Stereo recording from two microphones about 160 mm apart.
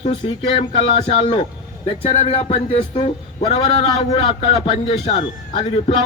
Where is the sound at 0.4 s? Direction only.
30° left (ahead or behind).